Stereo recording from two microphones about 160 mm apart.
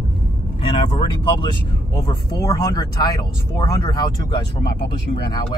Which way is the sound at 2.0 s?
25° left (ahead or behind).